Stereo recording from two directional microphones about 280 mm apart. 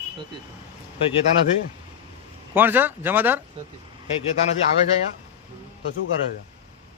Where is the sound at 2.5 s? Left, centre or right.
Centre.